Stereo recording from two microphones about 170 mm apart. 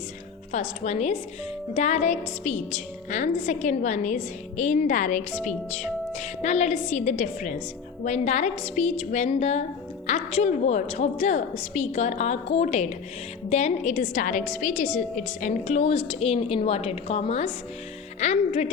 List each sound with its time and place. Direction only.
0.5 s a woman's voice: 40° left (ahead or behind)